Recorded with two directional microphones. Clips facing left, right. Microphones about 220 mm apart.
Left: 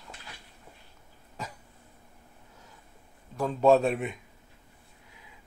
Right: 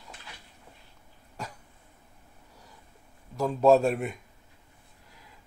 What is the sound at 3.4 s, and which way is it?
Speech, centre (ahead or behind).